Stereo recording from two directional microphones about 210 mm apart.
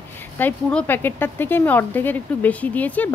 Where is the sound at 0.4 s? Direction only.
5° left (ahead or behind).